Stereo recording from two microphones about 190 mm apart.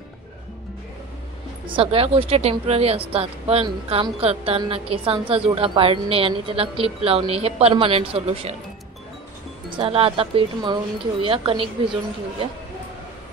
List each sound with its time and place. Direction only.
1.7 s a woman's voice: 30° right (ahead or behind)
9.7 s speech: 30° right (ahead or behind)